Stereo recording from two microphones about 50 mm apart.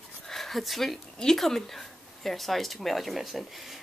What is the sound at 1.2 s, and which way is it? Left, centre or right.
Speech, centre.